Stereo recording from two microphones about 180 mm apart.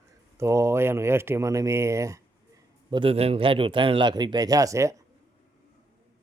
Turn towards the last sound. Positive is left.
turn(degrees=-15)  # may be behind; listen again after turning